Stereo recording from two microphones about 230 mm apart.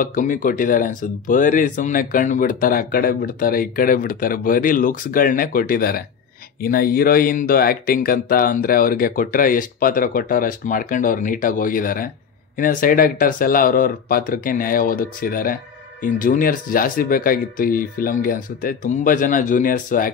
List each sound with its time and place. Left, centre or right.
0.0 s speech: left